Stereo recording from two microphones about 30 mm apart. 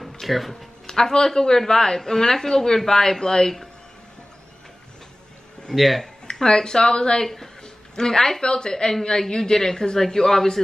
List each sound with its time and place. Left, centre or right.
0.0 s music: centre
0.8 s speech: left
5.8 s speech: centre
6.4 s speech: left
7.6 s a sound: left
8.4 s speech: left